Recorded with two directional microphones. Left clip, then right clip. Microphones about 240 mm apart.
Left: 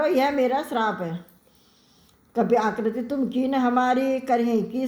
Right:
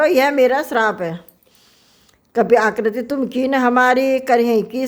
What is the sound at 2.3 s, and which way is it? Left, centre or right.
A woman's voice, right.